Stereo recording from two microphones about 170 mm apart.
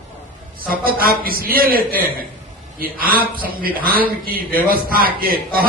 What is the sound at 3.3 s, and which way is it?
A man's voice, 60° right (ahead or behind).